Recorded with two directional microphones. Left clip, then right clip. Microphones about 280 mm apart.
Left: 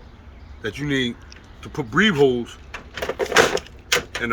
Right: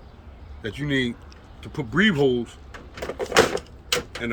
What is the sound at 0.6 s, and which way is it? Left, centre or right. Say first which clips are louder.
Speech: left 2 dB; centre.